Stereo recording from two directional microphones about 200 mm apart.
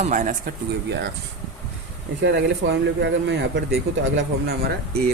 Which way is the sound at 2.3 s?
60° right (ahead or behind).